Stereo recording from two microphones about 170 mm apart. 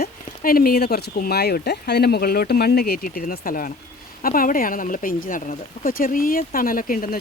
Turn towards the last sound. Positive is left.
turn(degrees=55)  # may be behind; listen again after turning